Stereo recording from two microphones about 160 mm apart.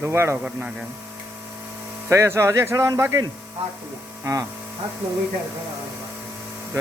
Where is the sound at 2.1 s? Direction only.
15° right (ahead or behind).